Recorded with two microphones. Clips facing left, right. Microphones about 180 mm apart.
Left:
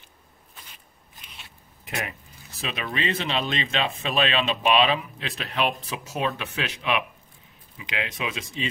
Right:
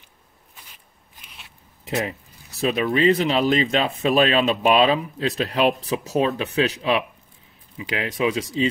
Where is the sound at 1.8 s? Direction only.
25° right (ahead or behind).